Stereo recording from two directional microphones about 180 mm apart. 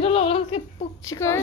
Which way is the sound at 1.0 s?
15° left (ahead or behind).